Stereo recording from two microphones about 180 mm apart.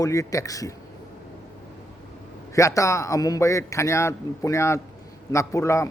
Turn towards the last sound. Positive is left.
turn(degrees=15)  # may be behind; listen again after turning